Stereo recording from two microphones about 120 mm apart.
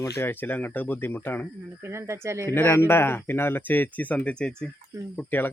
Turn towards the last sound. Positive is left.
turn(degrees=10)  # may be behind; listen again after turning